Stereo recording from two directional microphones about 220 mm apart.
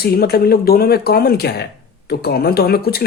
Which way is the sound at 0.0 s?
45° left (ahead or behind).